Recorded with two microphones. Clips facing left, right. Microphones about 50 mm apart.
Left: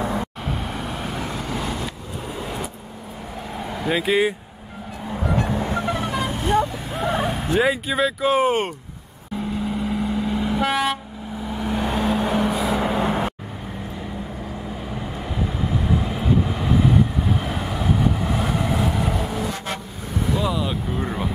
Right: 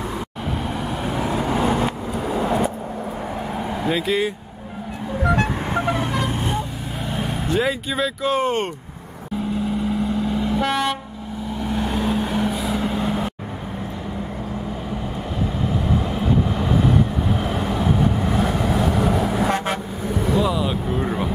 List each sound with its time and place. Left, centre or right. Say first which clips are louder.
0.7 s vehicle: right 4 dB; centre; by 1.9 s right
3.5 s vehicle: right 1 dB; centre
3.9 s speech: left 3 dB; centre
5.6 s vehicle: right 1 dB; right
5.9 s vehicle: right 2 dB; centre
7.2 s speech: even; centre
9.8 s vehicle: right 2 dB; centre
12.9 s vehicle: left 1 dB; left
15.6 s vehicle: even; centre
20.2 s vehicle: right 3 dB; centre